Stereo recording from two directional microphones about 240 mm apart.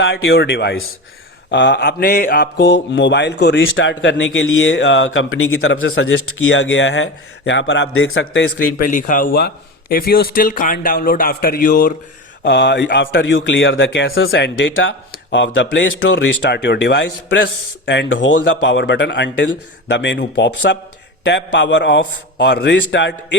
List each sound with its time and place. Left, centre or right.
0.0 s mantra: left
8.8 s speech: left
12.4 s mantra: left